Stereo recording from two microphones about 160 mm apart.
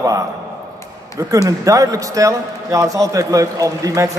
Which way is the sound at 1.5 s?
20° right (ahead or behind).